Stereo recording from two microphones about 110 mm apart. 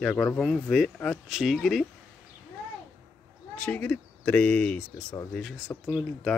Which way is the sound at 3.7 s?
10° left (ahead or behind).